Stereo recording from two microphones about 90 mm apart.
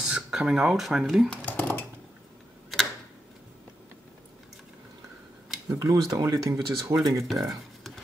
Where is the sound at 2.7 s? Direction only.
Centre (ahead or behind).